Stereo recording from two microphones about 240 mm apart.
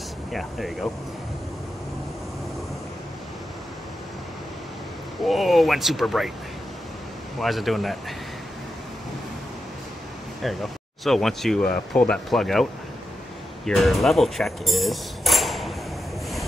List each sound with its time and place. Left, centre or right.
0.3 s speech: centre
5.2 s speech: centre
7.3 s speech: centre
10.4 s speech: centre
13.7 s cutlery: centre